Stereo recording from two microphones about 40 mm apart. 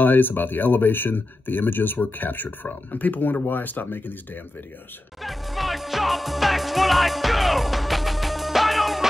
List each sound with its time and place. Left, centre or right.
0.0 s speech: left
5.2 s music: centre